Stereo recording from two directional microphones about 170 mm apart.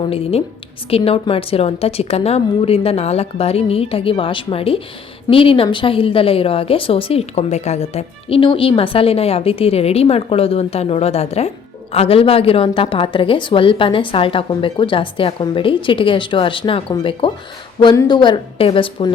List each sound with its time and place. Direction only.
0.0 s a woman's voice: 35° left (ahead or behind)